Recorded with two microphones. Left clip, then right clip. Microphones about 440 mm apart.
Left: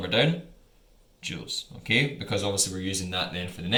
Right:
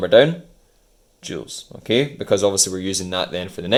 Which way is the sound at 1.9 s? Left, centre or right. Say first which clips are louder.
Right 7 dB; centre.